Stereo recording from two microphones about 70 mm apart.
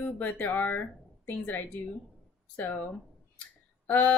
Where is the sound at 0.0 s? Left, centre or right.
Left.